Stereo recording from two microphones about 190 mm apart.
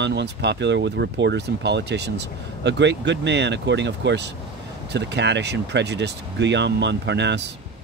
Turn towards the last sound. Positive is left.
turn(degrees=-65)  # may be behind; listen again after turning